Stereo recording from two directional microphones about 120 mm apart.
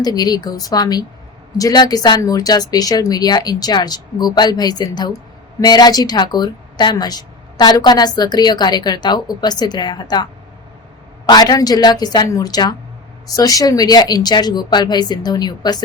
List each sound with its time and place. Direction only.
0.0 s a woman's voice: 35° left (ahead or behind)
11.3 s a woman's voice: 35° left (ahead or behind)